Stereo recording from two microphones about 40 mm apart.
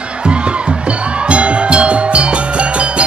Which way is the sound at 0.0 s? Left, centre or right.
Right.